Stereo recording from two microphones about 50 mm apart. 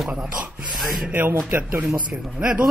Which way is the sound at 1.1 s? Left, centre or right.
Right.